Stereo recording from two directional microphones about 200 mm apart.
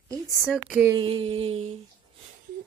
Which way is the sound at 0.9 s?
25° right (ahead or behind).